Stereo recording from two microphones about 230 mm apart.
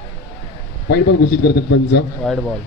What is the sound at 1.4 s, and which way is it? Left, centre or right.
Speech, left.